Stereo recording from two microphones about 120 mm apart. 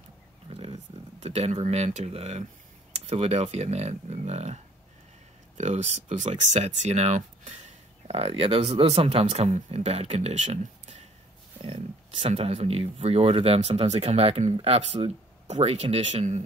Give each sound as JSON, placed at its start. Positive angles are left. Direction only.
{"t": 0.5, "sound": "a sound", "side_deg": -55}
{"t": 1.2, "sound": "speech", "side_deg": -65}
{"t": 5.6, "sound": "speech", "side_deg": -75}
{"t": 11.6, "sound": "speech", "side_deg": -55}